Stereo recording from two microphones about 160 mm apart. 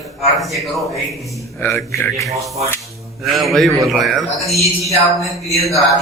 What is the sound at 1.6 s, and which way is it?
Speech, 20° left (ahead or behind).